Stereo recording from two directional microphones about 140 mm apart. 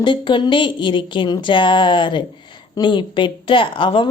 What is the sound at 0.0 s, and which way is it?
A woman's voice, 35° left (ahead or behind).